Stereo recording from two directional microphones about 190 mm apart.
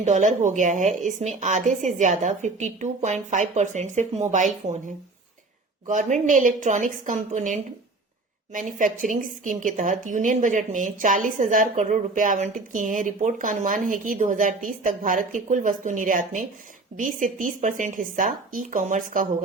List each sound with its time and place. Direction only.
0.0 s a woman's voice: 40° right (ahead or behind)
5.9 s a woman's voice: 40° right (ahead or behind)